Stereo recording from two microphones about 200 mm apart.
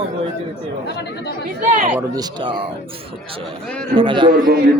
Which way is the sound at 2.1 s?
25° right (ahead or behind).